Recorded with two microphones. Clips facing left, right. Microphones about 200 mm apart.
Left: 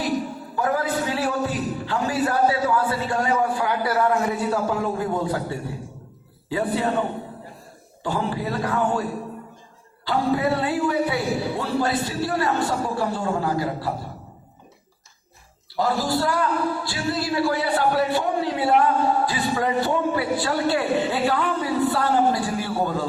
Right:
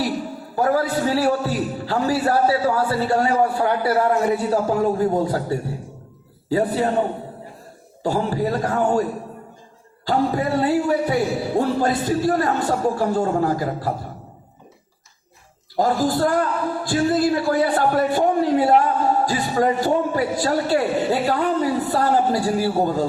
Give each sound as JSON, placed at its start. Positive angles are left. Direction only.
{"t": 0.5, "sound": "a man's voice", "side_deg": -40}
{"t": 8.0, "sound": "a man's voice", "side_deg": -40}
{"t": 10.1, "sound": "a man's voice", "side_deg": -40}
{"t": 15.7, "sound": "a man's voice", "side_deg": -45}